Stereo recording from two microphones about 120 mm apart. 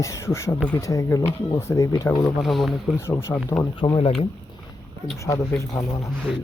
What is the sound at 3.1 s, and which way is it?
Speech, 20° left (ahead or behind).